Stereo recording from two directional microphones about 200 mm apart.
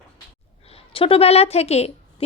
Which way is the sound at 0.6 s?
30° left (ahead or behind).